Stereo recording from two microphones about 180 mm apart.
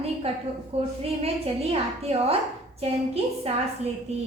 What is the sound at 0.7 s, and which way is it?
A woman's voice, 35° right (ahead or behind).